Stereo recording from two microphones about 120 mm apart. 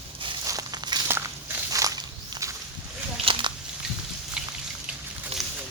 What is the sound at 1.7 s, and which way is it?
Walk, 30° right (ahead or behind).